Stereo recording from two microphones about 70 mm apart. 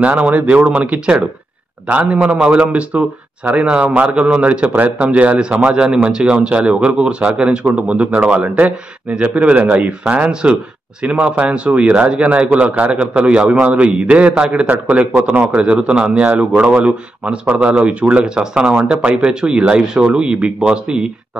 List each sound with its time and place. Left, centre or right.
0.0 s a man's voice: centre